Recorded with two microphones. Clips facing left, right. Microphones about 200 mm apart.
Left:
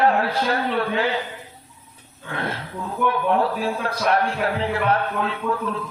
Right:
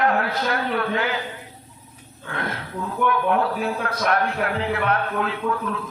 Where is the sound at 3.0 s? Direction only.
30° left (ahead or behind).